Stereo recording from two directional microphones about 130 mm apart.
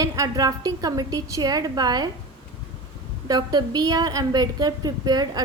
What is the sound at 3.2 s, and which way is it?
A woman's voice, 30° right (ahead or behind).